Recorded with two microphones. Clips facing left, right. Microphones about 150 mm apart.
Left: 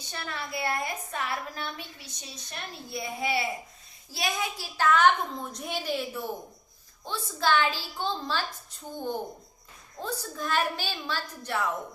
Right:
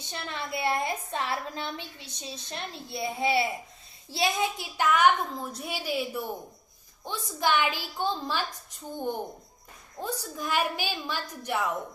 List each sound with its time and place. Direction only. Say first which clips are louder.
0.0 s a woman's voice: right 1 dB; 20° right (ahead or behind)
10.0 s a woman's voice: even; 10° right (ahead or behind)